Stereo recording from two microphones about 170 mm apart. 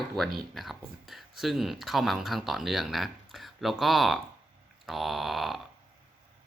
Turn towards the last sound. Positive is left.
turn(degrees=0)  # may be behind; listen again after turning